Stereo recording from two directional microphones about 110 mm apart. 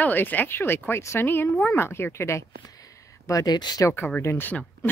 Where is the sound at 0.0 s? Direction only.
15° left (ahead or behind); by 3.8 s 40° left (ahead or behind).